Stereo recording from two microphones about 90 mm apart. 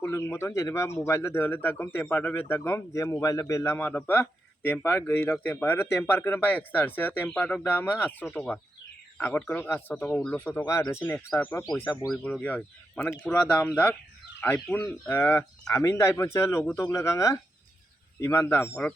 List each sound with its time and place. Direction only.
0.0 s speech: 30° left (ahead or behind)
15.6 s speech: 35° left (ahead or behind)